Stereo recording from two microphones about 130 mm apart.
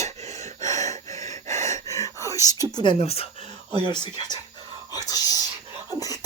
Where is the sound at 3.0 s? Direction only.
50° left (ahead or behind).